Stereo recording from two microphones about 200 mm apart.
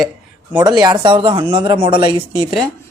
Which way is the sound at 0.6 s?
20° right (ahead or behind).